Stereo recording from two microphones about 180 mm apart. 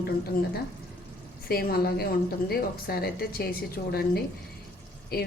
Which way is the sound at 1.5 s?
55° left (ahead or behind).